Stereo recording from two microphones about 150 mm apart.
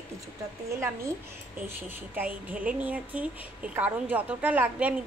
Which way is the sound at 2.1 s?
10° right (ahead or behind).